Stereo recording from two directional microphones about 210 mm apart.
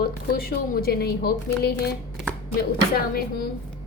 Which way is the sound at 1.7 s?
5° left (ahead or behind).